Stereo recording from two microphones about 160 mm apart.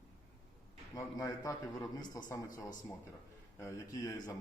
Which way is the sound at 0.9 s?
20° left (ahead or behind).